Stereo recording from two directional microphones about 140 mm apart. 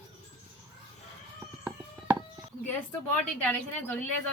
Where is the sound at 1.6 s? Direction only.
20° right (ahead or behind).